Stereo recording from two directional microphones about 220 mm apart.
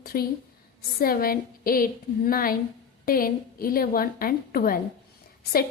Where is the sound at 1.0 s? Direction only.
40° left (ahead or behind).